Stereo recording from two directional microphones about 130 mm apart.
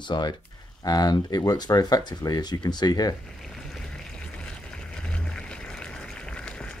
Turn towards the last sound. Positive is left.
turn(degrees=5)  # may be behind; listen again after turning